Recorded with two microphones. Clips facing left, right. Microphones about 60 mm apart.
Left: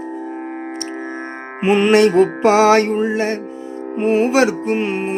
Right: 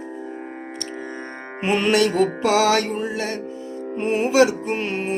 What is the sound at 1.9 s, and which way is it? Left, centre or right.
Music, left.